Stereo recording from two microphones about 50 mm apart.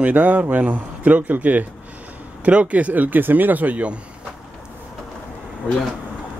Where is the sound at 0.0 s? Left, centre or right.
Right.